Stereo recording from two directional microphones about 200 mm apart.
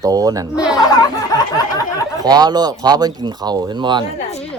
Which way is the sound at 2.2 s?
20° right (ahead or behind).